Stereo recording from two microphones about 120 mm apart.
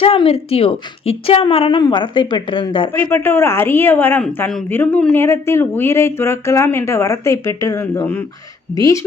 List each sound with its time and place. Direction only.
0.0 s a woman's voice: 50° left (ahead or behind)
3.0 s speech: 20° left (ahead or behind)